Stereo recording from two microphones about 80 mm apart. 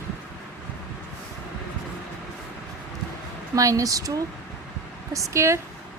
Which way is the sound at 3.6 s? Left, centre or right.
Right.